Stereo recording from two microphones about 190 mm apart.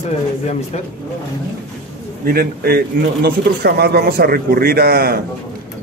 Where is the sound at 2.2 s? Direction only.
55° right (ahead or behind).